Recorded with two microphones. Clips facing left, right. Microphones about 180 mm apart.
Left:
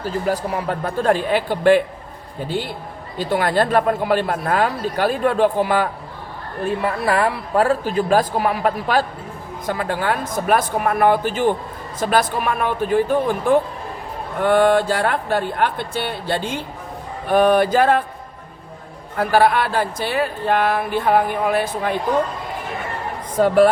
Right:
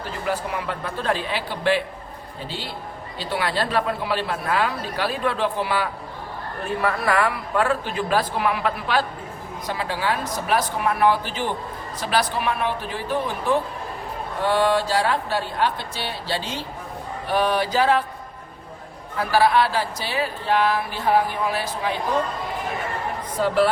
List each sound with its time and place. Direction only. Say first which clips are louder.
0.3 s speech: left 3 dB; 40° left (ahead or behind)
6.7 s speech: left 3 dB; 25° left (ahead or behind); by 18.0 s 50° left (ahead or behind)
19.1 s speech: left 3 dB; 50° left (ahead or behind)
23.4 s speech: left 6 dB; 50° left (ahead or behind)